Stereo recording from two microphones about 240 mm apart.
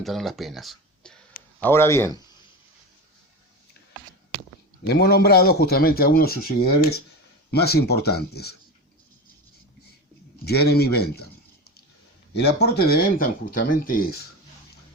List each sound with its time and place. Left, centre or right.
0.0 s a man's voice: centre
4.9 s speech: left
10.4 s speech: left